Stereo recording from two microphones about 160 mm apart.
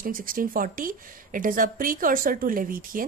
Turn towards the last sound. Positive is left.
turn(degrees=-60)  # may be behind; listen again after turning